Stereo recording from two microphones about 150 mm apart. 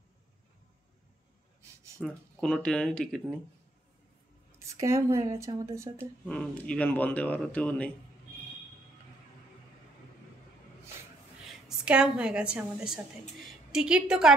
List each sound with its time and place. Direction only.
2.0 s speech: 5° left (ahead or behind)
4.6 s speech: 20° right (ahead or behind)
6.2 s a man's voice: 5° left (ahead or behind)
11.8 s speech: 5° right (ahead or behind)